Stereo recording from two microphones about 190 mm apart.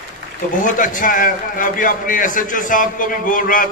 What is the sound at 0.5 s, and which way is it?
A man's voice, 45° left (ahead or behind).